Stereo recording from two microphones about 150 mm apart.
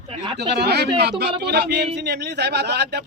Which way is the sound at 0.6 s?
90° right.